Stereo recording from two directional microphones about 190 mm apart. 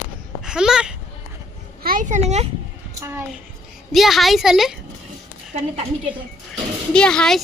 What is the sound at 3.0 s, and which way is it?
Speech, 10° right (ahead or behind).